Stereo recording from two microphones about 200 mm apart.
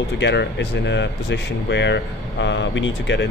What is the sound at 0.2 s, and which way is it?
Speech, 60° left (ahead or behind).